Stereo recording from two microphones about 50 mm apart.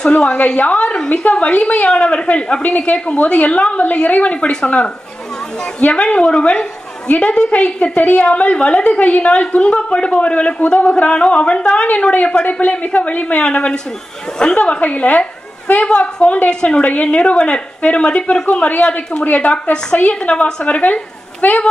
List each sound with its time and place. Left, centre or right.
0.2 s a woman's voice: left
16.8 s a woman's voice: left